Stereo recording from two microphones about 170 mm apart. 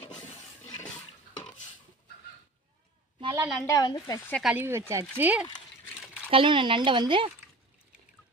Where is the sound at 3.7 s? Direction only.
20° left (ahead or behind).